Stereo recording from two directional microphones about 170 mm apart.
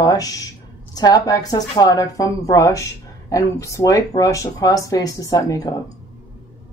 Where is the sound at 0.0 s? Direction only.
20° left (ahead or behind).